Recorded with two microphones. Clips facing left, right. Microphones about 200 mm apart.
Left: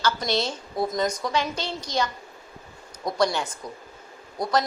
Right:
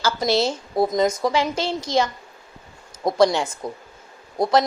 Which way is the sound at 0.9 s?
25° right (ahead or behind).